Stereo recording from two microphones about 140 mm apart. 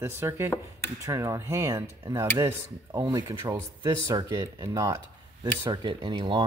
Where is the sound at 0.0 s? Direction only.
20° right (ahead or behind).